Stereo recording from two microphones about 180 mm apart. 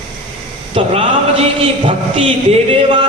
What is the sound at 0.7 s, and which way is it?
Speech, 35° right (ahead or behind).